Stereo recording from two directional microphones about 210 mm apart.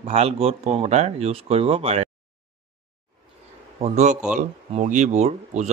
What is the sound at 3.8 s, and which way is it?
Speech, 35° right (ahead or behind).